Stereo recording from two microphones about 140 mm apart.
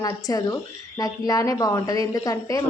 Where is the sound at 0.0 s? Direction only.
25° left (ahead or behind).